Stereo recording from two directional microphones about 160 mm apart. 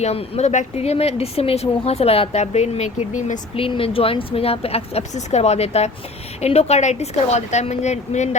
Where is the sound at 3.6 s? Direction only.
35° left (ahead or behind).